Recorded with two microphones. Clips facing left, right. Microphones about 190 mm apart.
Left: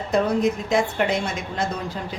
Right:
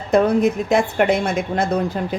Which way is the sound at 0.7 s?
55° right (ahead or behind).